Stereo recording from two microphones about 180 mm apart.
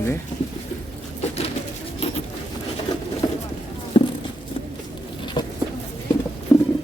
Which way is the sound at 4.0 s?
25° left (ahead or behind).